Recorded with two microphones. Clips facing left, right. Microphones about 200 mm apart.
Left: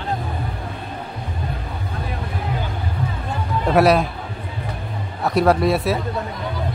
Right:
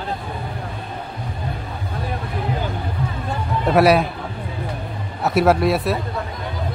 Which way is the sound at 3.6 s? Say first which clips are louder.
Right 1 dB; centre (ahead or behind).